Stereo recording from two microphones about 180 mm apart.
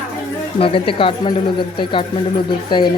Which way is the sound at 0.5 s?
30° left (ahead or behind).